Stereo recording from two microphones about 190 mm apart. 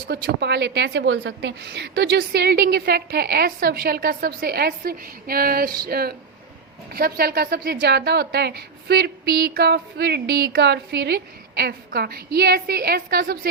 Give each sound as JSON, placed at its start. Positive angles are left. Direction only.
{"t": 0.1, "sound": "a woman's voice", "side_deg": -65}